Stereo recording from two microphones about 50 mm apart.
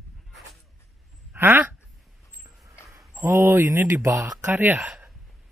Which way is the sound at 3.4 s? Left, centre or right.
Right.